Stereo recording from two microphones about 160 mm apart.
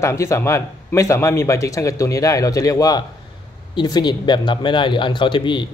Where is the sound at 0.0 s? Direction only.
15° left (ahead or behind).